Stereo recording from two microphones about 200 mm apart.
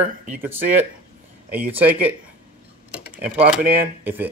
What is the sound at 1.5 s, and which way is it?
Speech, 10° right (ahead or behind).